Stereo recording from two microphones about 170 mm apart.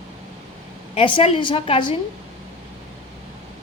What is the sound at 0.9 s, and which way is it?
A woman's voice, 30° left (ahead or behind).